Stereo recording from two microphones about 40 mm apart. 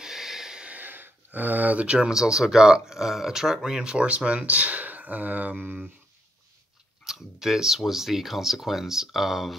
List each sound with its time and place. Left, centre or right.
0.0 s snort: centre
0.8 s a sound: right
1.9 s speech: right
2.1 s speech: centre; by 5.8 s right
7.1 s speech: centre